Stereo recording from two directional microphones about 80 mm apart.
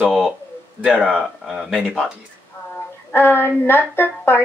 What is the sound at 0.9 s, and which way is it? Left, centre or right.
Speech, centre.